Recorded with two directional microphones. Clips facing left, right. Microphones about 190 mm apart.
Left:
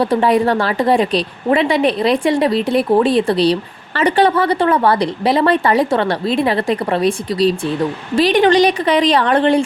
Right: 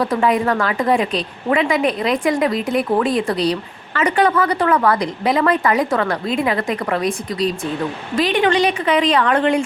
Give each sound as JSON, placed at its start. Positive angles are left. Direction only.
{"t": 0.0, "sound": "a woman's voice", "side_deg": 30}